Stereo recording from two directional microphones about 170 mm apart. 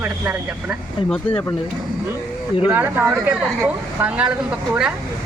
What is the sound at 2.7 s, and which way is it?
Speech, 10° right (ahead or behind).